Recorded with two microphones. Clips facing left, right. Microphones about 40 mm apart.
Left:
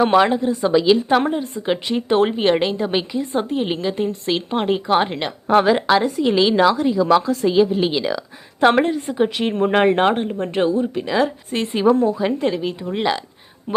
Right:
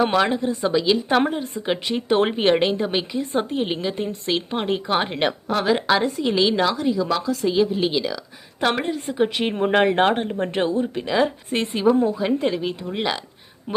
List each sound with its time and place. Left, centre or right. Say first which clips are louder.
0.1 s a woman's voice: left 5 dB; centre
1.2 s a woman's voice: left 2 dB; centre
7.1 s speech: left 7 dB; centre
7.4 s a woman's voice: left 4 dB; centre
11.7 s a woman's voice: left 3 dB; centre